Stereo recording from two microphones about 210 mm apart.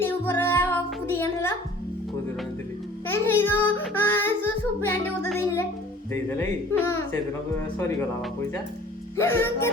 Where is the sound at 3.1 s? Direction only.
10° left (ahead or behind).